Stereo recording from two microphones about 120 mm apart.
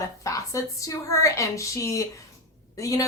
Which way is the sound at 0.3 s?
25° left (ahead or behind).